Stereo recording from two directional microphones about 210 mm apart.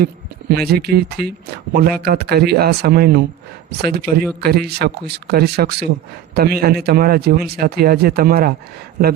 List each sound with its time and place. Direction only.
0.5 s a man's voice: 50° right (ahead or behind)